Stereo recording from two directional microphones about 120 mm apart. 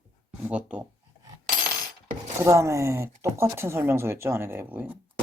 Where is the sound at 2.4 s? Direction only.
25° right (ahead or behind).